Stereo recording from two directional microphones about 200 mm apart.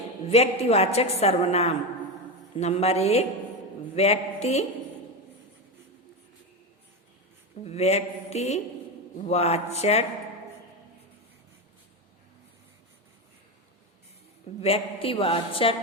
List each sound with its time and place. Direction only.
0.3 s a woman's voice: 30° left (ahead or behind)
7.6 s a woman's voice: 30° left (ahead or behind)
14.6 s a man's voice: 30° left (ahead or behind)